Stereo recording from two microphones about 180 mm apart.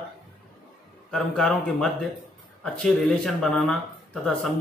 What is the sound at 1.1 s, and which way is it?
Speech, 5° left (ahead or behind).